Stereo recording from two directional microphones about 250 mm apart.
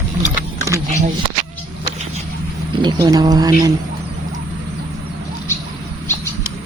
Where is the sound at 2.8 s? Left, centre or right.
Centre.